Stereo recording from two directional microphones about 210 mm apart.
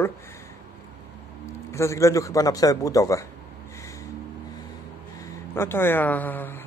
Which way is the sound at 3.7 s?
15° left (ahead or behind).